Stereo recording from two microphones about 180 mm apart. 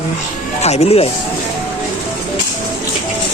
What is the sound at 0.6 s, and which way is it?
Speech, 35° left (ahead or behind).